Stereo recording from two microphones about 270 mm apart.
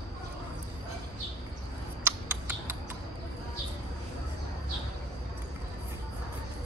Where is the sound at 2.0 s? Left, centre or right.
Centre.